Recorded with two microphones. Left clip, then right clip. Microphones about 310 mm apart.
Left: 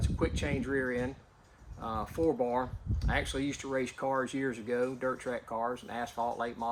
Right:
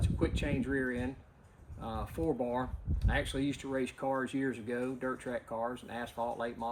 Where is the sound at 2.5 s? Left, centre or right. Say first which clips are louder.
Left 3 dB; centre.